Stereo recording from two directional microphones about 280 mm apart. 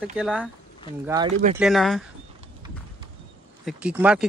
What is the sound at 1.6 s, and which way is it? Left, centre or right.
Speech, centre.